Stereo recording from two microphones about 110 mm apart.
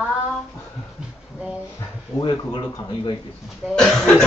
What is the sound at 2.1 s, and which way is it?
Speech, 45° left (ahead or behind).